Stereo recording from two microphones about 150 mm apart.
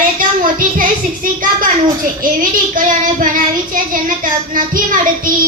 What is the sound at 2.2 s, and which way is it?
Child singing, 65° right (ahead or behind).